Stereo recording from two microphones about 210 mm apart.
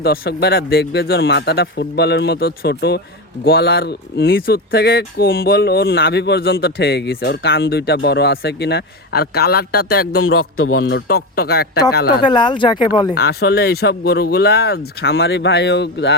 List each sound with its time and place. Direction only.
0.0 s speech: 50° left (ahead or behind)
10.2 s speech: 75° left (ahead or behind)
10.8 s speech: 50° left (ahead or behind)
12.2 s speech: 20° left (ahead or behind)
13.1 s speech: 50° left (ahead or behind)